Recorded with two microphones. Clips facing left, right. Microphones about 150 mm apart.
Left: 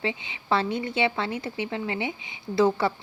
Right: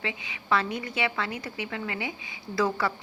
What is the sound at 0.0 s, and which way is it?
Speech, 30° left (ahead or behind).